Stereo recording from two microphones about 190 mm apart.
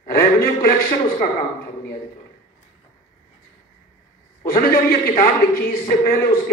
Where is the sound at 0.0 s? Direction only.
50° left (ahead or behind).